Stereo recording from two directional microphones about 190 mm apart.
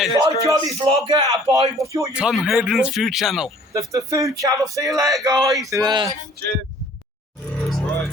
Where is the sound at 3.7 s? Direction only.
15° right (ahead or behind).